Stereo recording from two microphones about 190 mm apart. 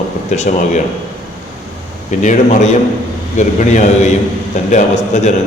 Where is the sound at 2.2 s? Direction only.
40° left (ahead or behind).